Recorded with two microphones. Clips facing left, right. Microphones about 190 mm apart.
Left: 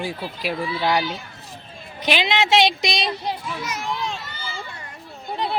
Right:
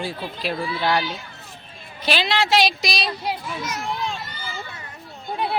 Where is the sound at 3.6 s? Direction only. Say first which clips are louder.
Even; centre (ahead or behind).